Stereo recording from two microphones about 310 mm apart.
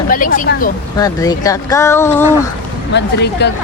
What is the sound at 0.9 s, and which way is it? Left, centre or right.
Speech, centre.